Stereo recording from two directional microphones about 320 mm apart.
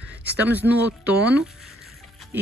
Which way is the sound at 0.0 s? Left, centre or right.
Centre.